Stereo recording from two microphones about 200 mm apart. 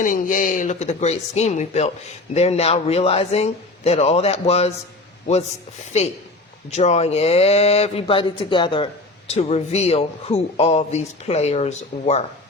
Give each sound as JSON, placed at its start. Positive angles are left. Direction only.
{"t": 0.0, "sound": "speech", "side_deg": 40}
{"t": 6.7, "sound": "speech", "side_deg": 35}